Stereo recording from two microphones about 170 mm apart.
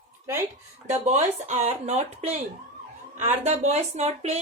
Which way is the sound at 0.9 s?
40° right (ahead or behind).